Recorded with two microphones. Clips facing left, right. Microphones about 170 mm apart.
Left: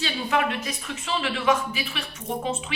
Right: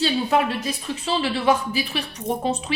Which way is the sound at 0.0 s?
35° right (ahead or behind).